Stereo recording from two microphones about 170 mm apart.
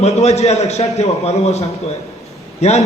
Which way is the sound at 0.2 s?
40° left (ahead or behind).